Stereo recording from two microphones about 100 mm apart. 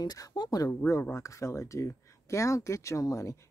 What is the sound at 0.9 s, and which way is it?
Speech, 25° left (ahead or behind).